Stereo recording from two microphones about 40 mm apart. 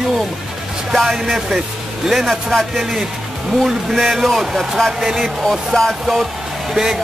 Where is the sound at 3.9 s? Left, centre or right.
Centre.